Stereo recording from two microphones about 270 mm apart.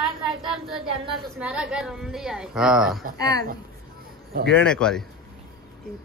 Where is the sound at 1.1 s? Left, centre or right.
Centre.